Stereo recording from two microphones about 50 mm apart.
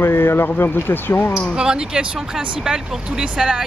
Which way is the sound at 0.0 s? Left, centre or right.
Left.